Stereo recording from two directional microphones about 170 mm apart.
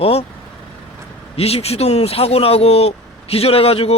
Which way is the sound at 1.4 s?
35° left (ahead or behind).